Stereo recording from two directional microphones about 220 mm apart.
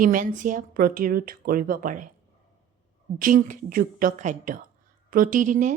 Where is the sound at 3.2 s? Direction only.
40° right (ahead or behind).